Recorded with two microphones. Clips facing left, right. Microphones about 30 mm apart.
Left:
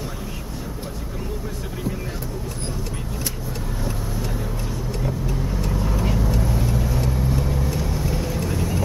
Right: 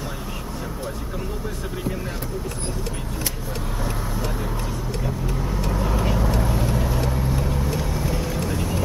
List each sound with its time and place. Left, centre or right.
5.7 s vehicle: right; by 8.8 s centre